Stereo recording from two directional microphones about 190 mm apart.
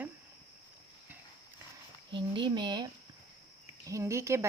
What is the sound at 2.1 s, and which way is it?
Speech, 25° right (ahead or behind).